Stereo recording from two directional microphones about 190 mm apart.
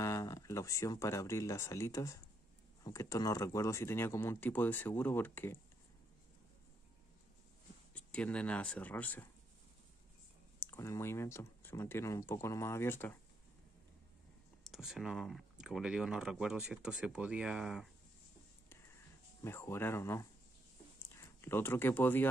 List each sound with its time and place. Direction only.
0.0 s speech: 15° left (ahead or behind)
7.9 s speech: 5° left (ahead or behind)
10.6 s speech: 15° left (ahead or behind)
14.6 s speech: centre (ahead or behind)
19.4 s speech: 15° left (ahead or behind)